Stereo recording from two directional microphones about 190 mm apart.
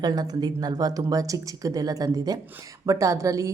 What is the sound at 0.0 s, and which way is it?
A woman's voice, 20° right (ahead or behind).